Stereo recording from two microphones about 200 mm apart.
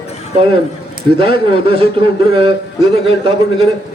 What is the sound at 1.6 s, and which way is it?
Speech, 25° right (ahead or behind).